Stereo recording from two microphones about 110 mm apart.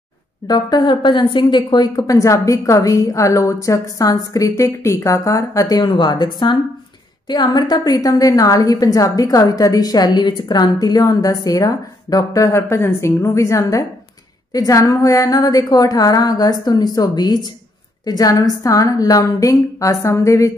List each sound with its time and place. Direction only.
0.5 s a woman's voice: 40° left (ahead or behind)